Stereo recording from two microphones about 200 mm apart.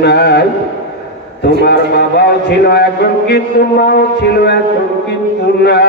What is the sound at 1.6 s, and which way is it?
A man's voice, 55° left (ahead or behind).